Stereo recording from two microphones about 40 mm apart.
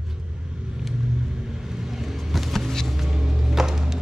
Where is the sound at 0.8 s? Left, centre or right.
Centre.